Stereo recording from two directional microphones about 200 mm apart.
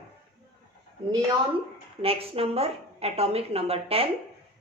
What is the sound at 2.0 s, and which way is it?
A woman's voice, 30° right (ahead or behind).